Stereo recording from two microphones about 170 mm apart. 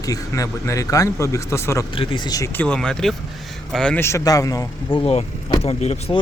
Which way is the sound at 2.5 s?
5° left (ahead or behind).